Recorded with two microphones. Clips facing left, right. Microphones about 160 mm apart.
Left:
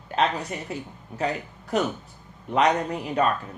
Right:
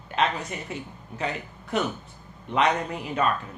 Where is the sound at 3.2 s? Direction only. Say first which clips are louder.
Left 2 dB; 35° left (ahead or behind).